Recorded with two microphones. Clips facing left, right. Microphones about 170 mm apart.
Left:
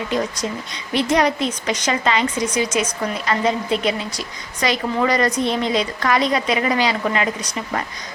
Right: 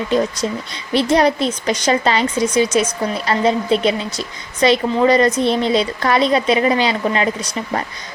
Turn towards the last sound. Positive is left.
turn(degrees=-30)  # may be behind; listen again after turning